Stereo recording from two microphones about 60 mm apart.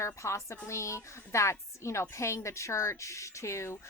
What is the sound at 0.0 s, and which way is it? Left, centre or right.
A woman's voice, left.